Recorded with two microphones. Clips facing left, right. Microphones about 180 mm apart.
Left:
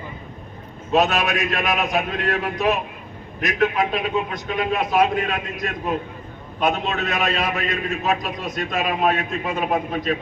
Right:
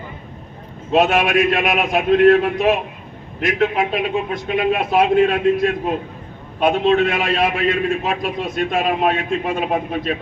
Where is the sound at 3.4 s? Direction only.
25° right (ahead or behind).